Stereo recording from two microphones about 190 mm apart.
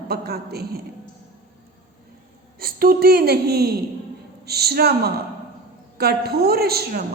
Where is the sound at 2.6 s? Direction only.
50° right (ahead or behind).